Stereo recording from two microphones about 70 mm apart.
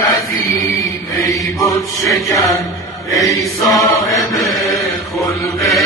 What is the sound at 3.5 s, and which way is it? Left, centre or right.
Chant, centre.